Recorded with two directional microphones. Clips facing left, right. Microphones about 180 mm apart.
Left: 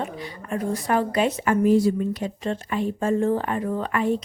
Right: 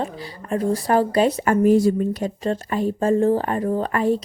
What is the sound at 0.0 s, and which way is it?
Speech, 35° right (ahead or behind).